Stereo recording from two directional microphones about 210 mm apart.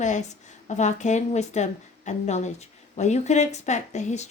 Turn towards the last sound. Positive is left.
turn(degrees=35)  # may be behind; listen again after turning